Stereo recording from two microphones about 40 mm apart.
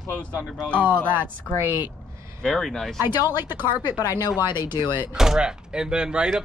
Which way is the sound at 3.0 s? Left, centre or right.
Right.